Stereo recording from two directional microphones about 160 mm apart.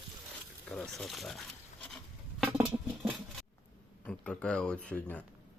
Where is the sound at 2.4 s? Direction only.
10° right (ahead or behind).